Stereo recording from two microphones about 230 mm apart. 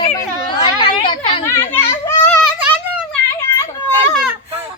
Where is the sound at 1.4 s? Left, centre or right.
Centre.